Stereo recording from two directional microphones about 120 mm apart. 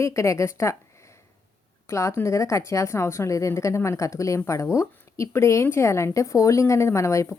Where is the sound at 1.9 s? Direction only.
25° left (ahead or behind).